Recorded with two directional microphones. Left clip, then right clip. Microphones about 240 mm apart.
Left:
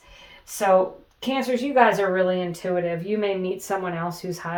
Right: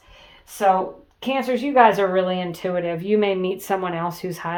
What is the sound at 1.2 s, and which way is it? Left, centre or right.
Speech, right.